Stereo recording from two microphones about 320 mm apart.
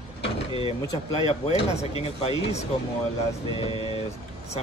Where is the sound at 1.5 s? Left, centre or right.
Centre.